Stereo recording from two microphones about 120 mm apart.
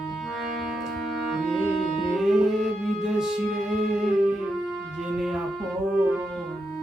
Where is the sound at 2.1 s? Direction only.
Centre (ahead or behind).